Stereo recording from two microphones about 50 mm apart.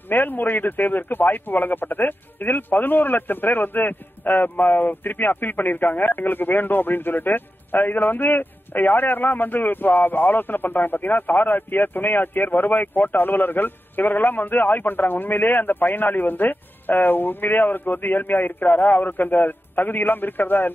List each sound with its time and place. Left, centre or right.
0.1 s speech: left